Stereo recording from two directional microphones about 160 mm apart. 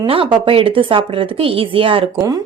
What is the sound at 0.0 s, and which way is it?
Speech, 30° right (ahead or behind).